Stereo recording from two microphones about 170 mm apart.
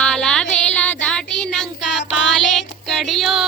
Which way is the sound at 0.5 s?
5° left (ahead or behind).